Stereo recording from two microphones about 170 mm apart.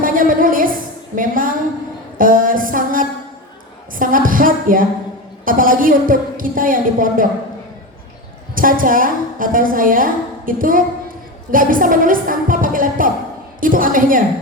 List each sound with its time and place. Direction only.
0.0 s a sound: 55° right (ahead or behind)
3.9 s a woman's voice: 55° right (ahead or behind)
8.5 s a woman's voice: 55° right (ahead or behind)